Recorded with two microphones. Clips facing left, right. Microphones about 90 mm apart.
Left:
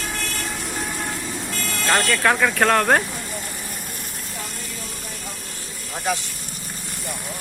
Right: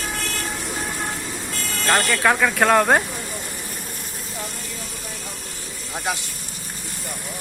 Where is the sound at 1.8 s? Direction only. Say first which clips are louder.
Even; 5° right (ahead or behind).